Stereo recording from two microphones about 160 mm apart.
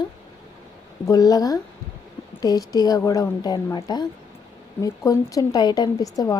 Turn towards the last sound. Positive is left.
turn(degrees=20)  # may be behind; listen again after turning